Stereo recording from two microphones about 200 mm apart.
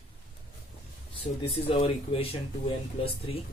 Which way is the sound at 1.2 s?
25° left (ahead or behind).